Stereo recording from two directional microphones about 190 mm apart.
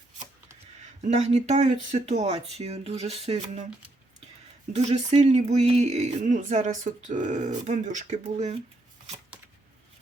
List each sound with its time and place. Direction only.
1.0 s speech: 35° right (ahead or behind)
4.7 s speech: 35° right (ahead or behind)